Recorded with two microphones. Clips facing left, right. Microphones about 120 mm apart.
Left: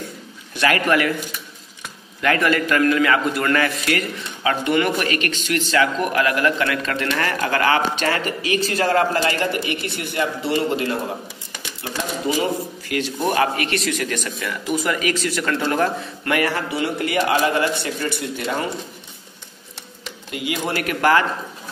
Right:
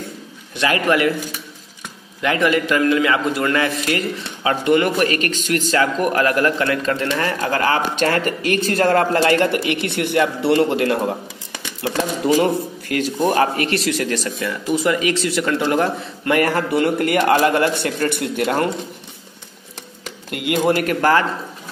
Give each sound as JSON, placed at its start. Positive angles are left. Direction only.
{"t": 0.6, "sound": "a man's voice", "side_deg": -25}
{"t": 2.2, "sound": "a man's voice", "side_deg": -20}
{"t": 8.0, "sound": "speech", "side_deg": -50}
{"t": 12.9, "sound": "a man's voice", "side_deg": -40}
{"t": 16.3, "sound": "speech", "side_deg": -40}
{"t": 20.2, "sound": "speech", "side_deg": -60}
{"t": 20.6, "sound": "a man's voice", "side_deg": -40}